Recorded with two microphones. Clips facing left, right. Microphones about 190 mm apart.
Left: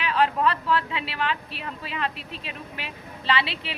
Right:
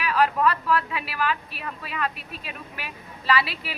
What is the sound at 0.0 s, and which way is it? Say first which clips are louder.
A woman's voice: right 1 dB; 25° left (ahead or behind).